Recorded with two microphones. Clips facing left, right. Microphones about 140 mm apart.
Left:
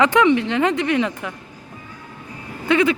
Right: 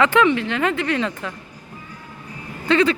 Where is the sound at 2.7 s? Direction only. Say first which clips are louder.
Even; 15° left (ahead or behind).